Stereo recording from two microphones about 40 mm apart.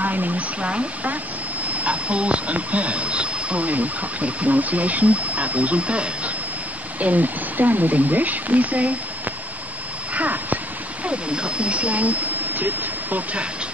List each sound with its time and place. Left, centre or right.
0.0 s speech: right
7.0 s speech: right
10.1 s speech: right
11.1 s speech: right